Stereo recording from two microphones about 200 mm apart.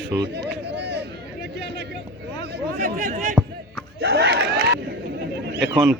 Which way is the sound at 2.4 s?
55° right (ahead or behind).